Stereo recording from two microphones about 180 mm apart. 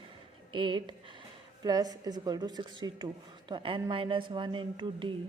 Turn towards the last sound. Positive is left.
turn(degrees=-30)  # may be behind; listen again after turning